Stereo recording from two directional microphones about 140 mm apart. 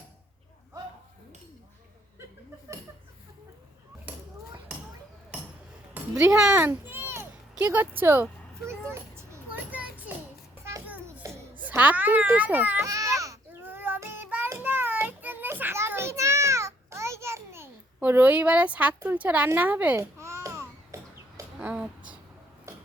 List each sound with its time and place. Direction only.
4.1 s a sound: 10° right (ahead or behind)
5.9 s a child's voice: 5° right (ahead or behind)
6.7 s children playing: 15° right (ahead or behind)
7.5 s speech: 10° right (ahead or behind)
8.9 s children playing: 20° right (ahead or behind)
10.6 s a sound: 20° right (ahead or behind)
11.2 s baby cry: 15° right (ahead or behind)
18.9 s a child's voice: 10° right (ahead or behind)
20.9 s chicken: 20° right (ahead or behind)
21.7 s speech: 10° right (ahead or behind)